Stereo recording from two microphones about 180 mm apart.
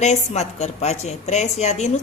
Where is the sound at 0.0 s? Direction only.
40° left (ahead or behind).